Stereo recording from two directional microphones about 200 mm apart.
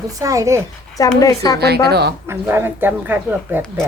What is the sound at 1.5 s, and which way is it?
Speech, 55° right (ahead or behind).